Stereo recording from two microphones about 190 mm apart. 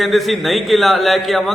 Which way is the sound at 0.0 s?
Centre (ahead or behind).